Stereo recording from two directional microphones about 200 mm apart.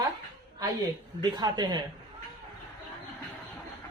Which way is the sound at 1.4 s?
20° right (ahead or behind).